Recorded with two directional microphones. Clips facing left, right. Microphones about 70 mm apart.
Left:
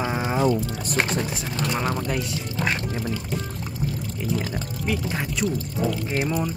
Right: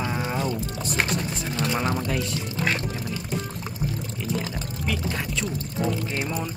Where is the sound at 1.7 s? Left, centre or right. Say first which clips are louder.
Left 1 dB; centre.